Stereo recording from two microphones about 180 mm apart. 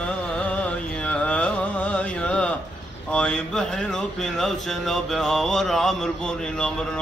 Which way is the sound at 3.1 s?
5° left (ahead or behind).